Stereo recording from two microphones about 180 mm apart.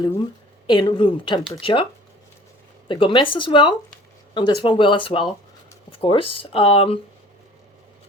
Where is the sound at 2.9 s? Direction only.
30° left (ahead or behind).